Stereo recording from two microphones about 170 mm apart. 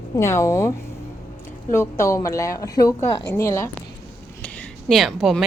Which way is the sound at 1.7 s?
15° left (ahead or behind).